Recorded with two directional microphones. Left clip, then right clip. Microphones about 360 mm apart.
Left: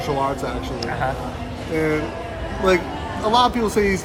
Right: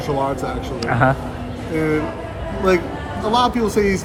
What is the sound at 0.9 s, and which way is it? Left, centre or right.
Speech, right.